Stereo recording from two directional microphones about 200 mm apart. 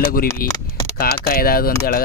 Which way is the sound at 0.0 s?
45° left (ahead or behind).